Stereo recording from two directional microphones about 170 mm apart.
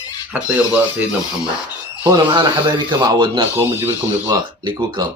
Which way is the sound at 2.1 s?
25° right (ahead or behind).